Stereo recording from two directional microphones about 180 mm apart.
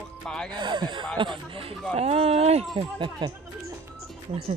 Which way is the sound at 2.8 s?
25° right (ahead or behind).